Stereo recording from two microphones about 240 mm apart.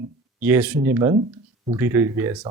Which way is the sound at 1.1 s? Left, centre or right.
Right.